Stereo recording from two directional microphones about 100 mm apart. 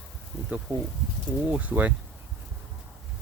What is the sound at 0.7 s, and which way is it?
Speech, 15° right (ahead or behind).